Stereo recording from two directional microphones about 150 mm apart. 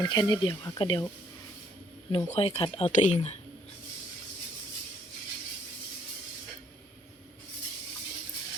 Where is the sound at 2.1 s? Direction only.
40° left (ahead or behind).